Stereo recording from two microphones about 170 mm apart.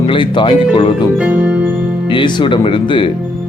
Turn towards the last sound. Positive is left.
turn(degrees=30)  # may be behind; listen again after turning